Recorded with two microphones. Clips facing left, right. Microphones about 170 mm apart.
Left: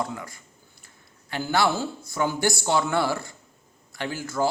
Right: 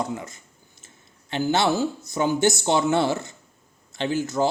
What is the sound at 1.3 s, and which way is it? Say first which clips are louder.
Speech: right 2 dB; 20° right (ahead or behind).